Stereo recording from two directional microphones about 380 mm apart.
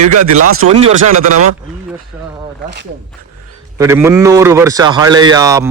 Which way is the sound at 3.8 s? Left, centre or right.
Centre.